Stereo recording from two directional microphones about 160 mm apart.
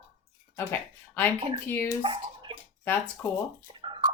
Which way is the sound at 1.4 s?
35° right (ahead or behind).